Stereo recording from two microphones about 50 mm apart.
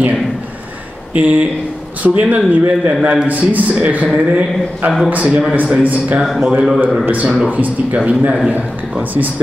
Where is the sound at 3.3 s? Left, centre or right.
Right.